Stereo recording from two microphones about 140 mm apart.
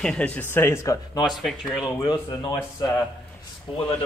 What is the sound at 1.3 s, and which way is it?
Speech, centre (ahead or behind).